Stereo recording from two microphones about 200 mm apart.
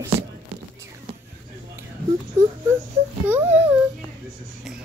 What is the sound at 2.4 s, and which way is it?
Whimper, 35° right (ahead or behind).